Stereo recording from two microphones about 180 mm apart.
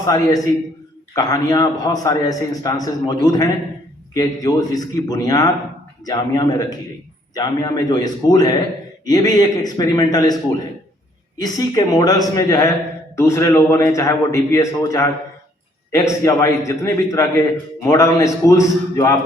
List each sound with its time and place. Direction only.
0.0 s a man's voice: 20° left (ahead or behind)